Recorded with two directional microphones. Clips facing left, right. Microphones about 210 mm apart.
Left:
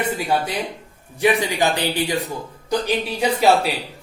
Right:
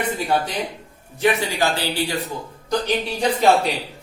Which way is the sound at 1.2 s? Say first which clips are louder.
Left 1 dB; 15° left (ahead or behind).